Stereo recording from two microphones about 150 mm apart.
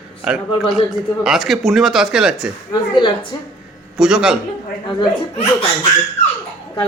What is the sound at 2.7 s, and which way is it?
Speech, 30° left (ahead or behind).